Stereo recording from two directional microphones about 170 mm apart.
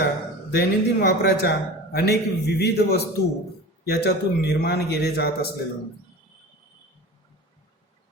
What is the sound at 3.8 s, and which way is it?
A man's voice, 75° left (ahead or behind).